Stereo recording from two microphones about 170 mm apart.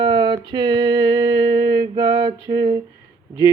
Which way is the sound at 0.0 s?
30° right (ahead or behind).